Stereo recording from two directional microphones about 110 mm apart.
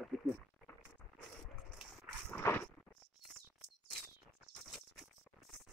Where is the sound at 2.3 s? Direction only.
20° left (ahead or behind).